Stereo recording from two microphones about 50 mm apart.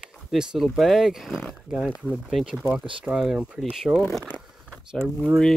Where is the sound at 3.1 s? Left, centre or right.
Centre.